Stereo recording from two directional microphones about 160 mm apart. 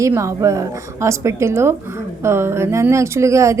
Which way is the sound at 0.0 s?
20° right (ahead or behind).